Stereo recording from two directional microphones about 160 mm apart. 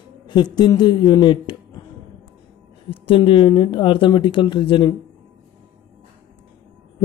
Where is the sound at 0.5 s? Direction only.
25° left (ahead or behind).